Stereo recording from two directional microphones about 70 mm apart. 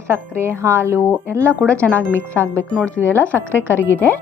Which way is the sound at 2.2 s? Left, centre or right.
Left.